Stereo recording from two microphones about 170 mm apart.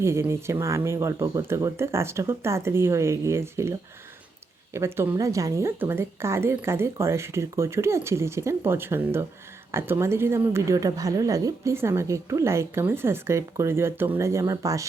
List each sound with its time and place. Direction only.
0.0 s a woman's voice: 15° right (ahead or behind)